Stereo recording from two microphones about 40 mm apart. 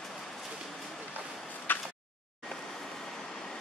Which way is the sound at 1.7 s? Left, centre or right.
Left.